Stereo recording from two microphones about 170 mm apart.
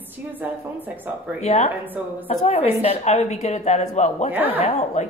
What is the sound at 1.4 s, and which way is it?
A woman's voice, 40° left (ahead or behind).